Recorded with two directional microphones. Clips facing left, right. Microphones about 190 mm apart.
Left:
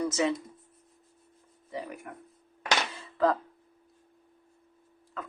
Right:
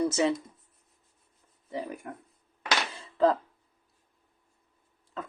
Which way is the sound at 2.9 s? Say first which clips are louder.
Right 4 dB; 25° right (ahead or behind).